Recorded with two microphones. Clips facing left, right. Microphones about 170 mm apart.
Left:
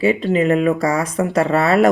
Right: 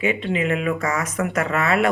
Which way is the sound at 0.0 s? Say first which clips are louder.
Left 6 dB; 35° left (ahead or behind).